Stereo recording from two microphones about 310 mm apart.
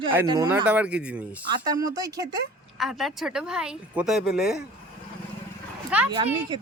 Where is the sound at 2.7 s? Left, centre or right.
Centre.